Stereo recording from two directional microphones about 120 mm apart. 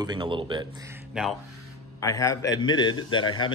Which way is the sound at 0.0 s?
40° right (ahead or behind).